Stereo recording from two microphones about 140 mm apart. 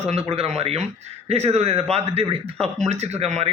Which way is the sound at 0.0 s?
50° right (ahead or behind).